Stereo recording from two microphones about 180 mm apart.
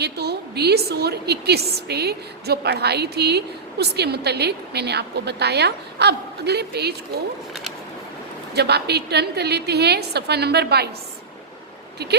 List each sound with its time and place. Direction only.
0.0 s a woman's voice: 65° right (ahead or behind)
8.5 s a woman's voice: 65° right (ahead or behind)